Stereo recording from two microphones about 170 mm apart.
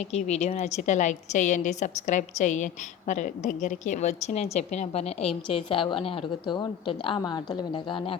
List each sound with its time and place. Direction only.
0.1 s a woman's voice: 40° left (ahead or behind)